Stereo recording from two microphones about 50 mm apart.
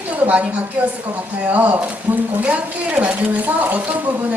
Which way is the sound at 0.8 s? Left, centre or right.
Right.